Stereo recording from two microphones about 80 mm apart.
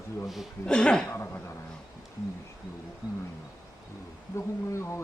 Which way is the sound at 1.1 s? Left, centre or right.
Left.